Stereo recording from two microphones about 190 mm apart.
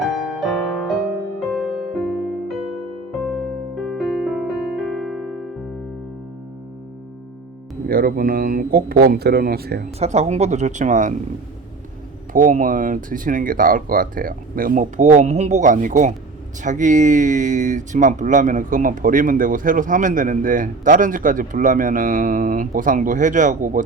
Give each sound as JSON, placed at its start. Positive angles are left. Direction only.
{"t": 0.0, "sound": "music", "side_deg": 0}
{"t": 7.9, "sound": "speech", "side_deg": -55}
{"t": 10.0, "sound": "speech", "side_deg": -35}
{"t": 12.3, "sound": "speech", "side_deg": -45}